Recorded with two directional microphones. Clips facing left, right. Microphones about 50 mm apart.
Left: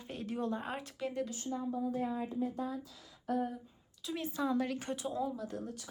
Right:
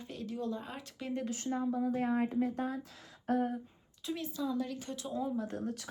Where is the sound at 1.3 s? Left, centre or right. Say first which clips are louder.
Right 3 dB; right.